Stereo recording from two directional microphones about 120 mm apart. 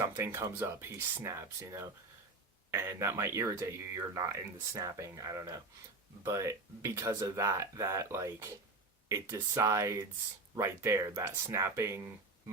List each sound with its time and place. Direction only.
0.0 s speech: 25° right (ahead or behind)
9.6 s speech: 25° right (ahead or behind)